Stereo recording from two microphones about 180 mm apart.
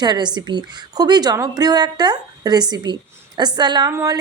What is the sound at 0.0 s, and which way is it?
A woman's voice, 25° right (ahead or behind).